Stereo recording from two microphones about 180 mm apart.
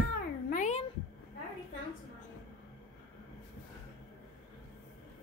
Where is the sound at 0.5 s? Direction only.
40° left (ahead or behind).